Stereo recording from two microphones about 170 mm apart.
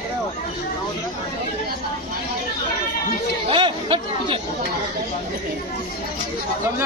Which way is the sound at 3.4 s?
30° right (ahead or behind).